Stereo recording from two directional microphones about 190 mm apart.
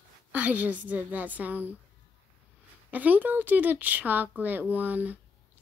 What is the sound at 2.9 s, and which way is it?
Speech, 10° right (ahead or behind).